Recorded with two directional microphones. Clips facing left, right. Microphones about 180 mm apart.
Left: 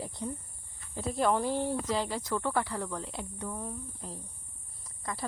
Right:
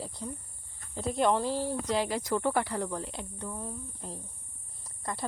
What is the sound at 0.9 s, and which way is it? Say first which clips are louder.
Speech: right 1 dB; centre (ahead or behind).